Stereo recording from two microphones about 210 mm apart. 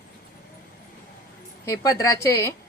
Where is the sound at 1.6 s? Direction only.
15° left (ahead or behind).